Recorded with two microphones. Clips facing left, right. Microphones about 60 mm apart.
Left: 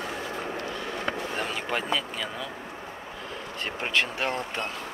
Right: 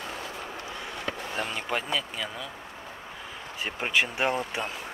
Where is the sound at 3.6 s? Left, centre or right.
Centre.